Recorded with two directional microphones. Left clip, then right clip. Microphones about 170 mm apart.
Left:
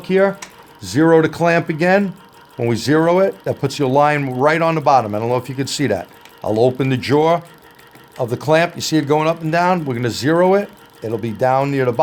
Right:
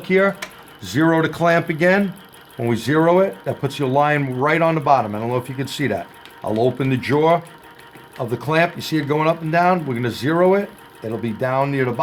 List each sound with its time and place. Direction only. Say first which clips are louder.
0.0 s speech: left 2 dB; 45° left (ahead or behind)
2.6 s speech: left 2 dB; 50° left (ahead or behind)